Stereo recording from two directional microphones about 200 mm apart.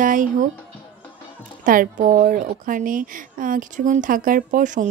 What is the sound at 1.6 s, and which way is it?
A woman's voice, 45° right (ahead or behind).